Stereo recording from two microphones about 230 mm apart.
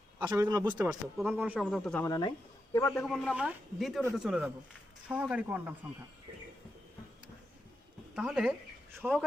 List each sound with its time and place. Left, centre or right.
0.2 s speech: centre
2.0 s speech: centre
8.1 s speech: centre